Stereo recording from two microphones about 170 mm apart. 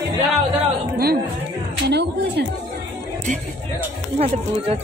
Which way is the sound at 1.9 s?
75° right (ahead or behind).